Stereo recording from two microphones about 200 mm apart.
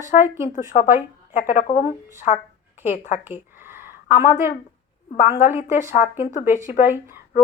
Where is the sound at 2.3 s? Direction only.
35° left (ahead or behind).